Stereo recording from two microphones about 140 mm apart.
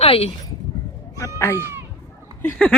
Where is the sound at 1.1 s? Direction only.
20° left (ahead or behind).